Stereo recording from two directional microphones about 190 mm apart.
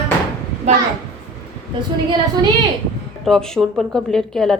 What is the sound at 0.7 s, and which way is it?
A child's voice, 35° right (ahead or behind).